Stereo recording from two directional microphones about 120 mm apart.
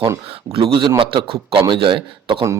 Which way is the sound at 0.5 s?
45° right (ahead or behind).